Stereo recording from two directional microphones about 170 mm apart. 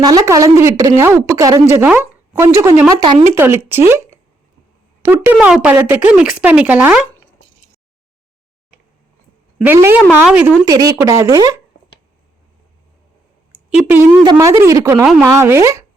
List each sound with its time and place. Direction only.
0.0 s a woman's voice: 20° right (ahead or behind)
3.3 s speech: 15° right (ahead or behind)
9.6 s speech: 15° right (ahead or behind)
10.7 s a woman's voice: 20° right (ahead or behind)
13.7 s speech: 5° right (ahead or behind)
14.3 s a woman's voice: 20° right (ahead or behind)